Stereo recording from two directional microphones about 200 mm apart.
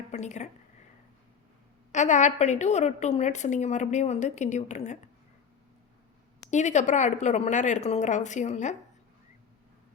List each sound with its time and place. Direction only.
0.1 s speech: 35° left (ahead or behind)
1.9 s a woman's voice: 35° left (ahead or behind)
6.5 s a woman's voice: 35° left (ahead or behind)